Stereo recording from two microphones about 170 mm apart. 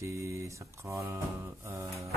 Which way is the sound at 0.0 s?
15° right (ahead or behind).